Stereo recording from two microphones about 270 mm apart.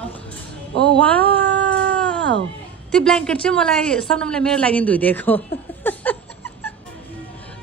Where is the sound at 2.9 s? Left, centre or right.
Centre.